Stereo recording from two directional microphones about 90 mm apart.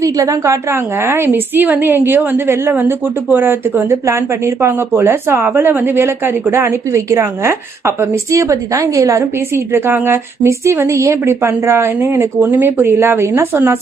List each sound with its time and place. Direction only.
0.0 s a woman's voice: 40° right (ahead or behind)